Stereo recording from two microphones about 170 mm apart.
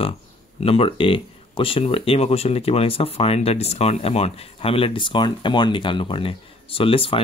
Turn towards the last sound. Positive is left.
turn(degrees=30)  # may be behind; listen again after turning